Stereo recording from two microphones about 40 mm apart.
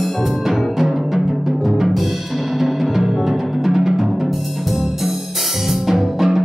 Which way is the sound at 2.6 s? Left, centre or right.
Centre.